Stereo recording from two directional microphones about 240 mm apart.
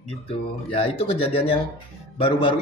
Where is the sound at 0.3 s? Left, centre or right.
Left.